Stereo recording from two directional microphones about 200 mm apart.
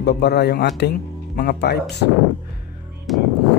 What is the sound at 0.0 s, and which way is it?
Speech, 55° left (ahead or behind).